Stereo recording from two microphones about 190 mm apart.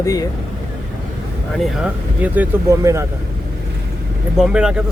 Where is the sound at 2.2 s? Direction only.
10° right (ahead or behind).